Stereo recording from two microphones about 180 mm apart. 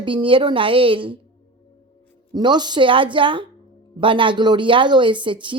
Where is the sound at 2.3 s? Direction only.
25° right (ahead or behind).